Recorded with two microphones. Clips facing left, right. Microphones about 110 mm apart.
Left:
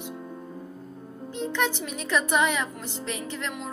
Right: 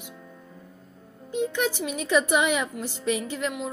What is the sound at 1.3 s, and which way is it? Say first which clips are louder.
Speech: right 2 dB; 15° right (ahead or behind).